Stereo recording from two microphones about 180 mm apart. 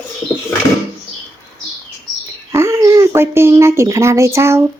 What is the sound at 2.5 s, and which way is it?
Speech, 15° right (ahead or behind).